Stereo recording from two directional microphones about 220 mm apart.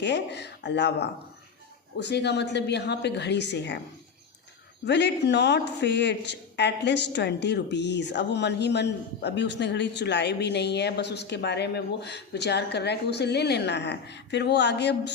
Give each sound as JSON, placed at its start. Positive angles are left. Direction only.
{"t": 0.0, "sound": "a woman's voice", "side_deg": 50}
{"t": 4.9, "sound": "a woman's voice", "side_deg": 50}